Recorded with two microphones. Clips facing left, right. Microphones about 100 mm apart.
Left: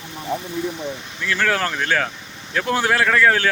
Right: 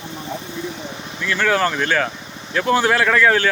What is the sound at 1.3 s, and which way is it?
Speech, centre (ahead or behind).